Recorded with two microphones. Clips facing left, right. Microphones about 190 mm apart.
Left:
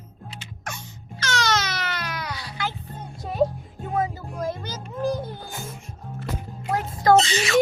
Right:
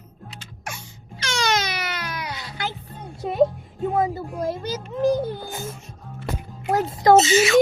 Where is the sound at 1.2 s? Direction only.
15° right (ahead or behind).